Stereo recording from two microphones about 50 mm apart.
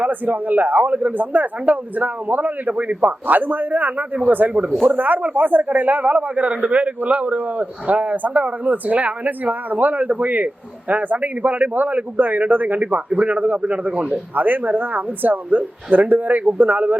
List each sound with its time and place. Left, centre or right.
0.0 s a man's voice: right
14.3 s a man's voice: right